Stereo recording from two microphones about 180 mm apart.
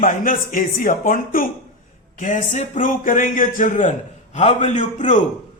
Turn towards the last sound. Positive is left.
turn(degrees=45)  # may be behind; listen again after turning